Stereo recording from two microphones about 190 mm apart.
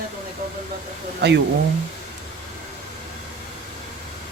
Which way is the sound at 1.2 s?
65° right (ahead or behind).